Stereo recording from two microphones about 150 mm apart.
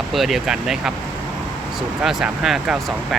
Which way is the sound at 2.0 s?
5° right (ahead or behind).